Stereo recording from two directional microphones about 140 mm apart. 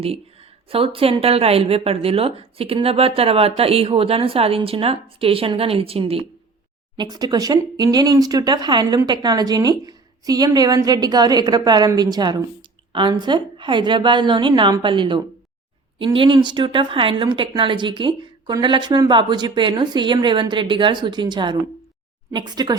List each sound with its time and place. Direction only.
0.7 s speech: 40° right (ahead or behind)
6.9 s speech: 30° right (ahead or behind)